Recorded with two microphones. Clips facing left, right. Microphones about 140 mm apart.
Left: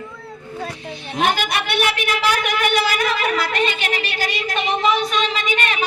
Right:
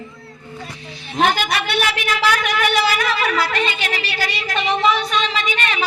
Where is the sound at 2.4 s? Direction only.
50° left (ahead or behind).